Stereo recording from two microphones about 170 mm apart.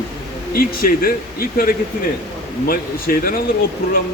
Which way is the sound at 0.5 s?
60° left (ahead or behind).